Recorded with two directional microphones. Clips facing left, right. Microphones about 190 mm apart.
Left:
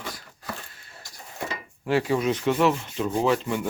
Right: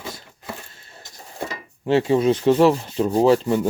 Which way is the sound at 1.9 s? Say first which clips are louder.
Right 6 dB; 25° right (ahead or behind).